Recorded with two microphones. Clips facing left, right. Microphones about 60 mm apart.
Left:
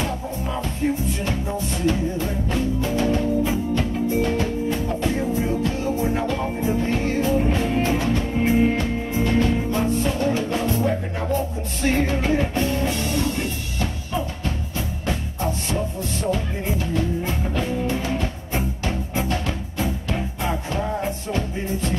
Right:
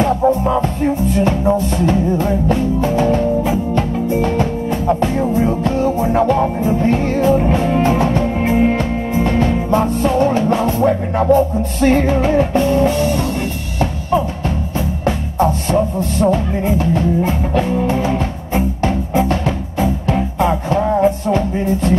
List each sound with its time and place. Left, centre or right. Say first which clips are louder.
0.3 s music: right 12 dB; right
15.0 s music: right 11 dB; right